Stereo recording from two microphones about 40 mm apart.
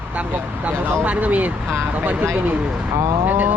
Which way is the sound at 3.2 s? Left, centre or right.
Right.